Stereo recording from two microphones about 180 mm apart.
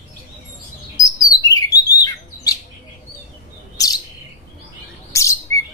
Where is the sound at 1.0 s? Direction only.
20° left (ahead or behind).